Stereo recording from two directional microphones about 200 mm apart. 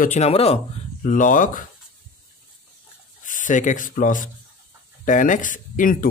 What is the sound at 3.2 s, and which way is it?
Speech, 40° left (ahead or behind).